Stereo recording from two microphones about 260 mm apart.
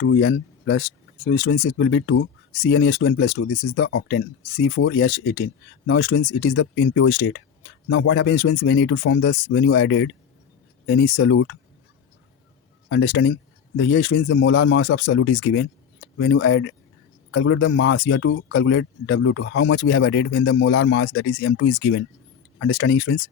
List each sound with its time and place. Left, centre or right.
0.0 s speech: left
12.9 s speech: left